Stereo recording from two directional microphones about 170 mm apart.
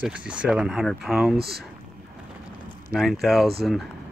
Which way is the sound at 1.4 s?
65° right (ahead or behind).